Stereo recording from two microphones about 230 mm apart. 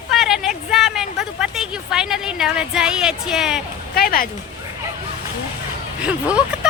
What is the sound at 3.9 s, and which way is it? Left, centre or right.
Speech, left.